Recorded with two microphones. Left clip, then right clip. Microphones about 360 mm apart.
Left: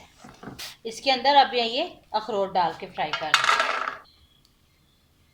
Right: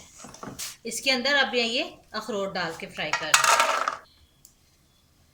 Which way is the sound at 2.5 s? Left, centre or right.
Left.